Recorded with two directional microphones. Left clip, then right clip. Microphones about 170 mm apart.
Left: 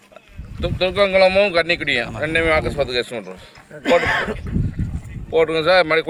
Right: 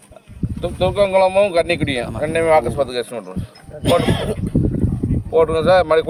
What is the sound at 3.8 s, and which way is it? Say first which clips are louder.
Speech: left 1 dB; 20° left (ahead or behind).